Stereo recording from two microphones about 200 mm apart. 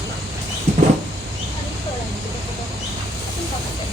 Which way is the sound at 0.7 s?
35° right (ahead or behind).